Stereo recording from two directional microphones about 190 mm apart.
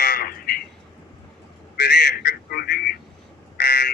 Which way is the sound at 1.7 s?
60° left (ahead or behind).